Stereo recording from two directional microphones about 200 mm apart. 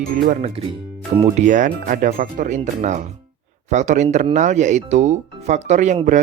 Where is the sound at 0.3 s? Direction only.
30° right (ahead or behind).